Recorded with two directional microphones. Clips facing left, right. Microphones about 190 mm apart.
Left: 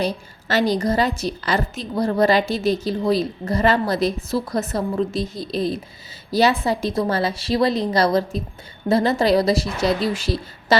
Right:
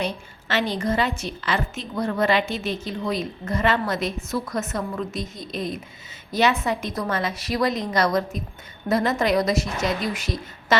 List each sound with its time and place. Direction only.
0.0 s a woman's voice: 40° left (ahead or behind)